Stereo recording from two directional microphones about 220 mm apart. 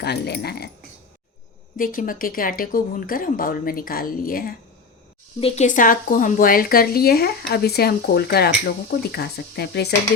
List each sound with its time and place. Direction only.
0.0 s speech: 50° left (ahead or behind)
1.7 s speech: 40° left (ahead or behind)
5.4 s speech: 30° left (ahead or behind); by 9.9 s 45° left (ahead or behind)